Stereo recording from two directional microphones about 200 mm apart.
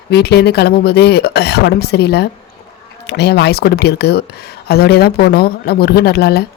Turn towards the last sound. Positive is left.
turn(degrees=55)  # may be behind; listen again after turning